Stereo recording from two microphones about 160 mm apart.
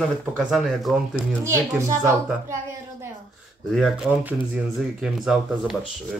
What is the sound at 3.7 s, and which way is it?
Speech, 5° right (ahead or behind).